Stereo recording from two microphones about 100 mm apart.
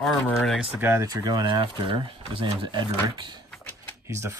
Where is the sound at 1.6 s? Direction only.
60° right (ahead or behind).